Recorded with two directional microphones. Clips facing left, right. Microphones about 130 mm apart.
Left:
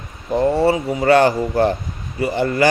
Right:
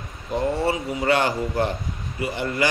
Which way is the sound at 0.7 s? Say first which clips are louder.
Left 7 dB; 40° left (ahead or behind).